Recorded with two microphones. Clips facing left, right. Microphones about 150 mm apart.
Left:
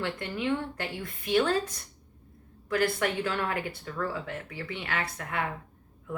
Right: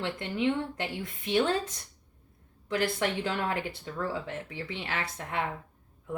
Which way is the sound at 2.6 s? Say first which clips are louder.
Left 2 dB; 20° right (ahead or behind).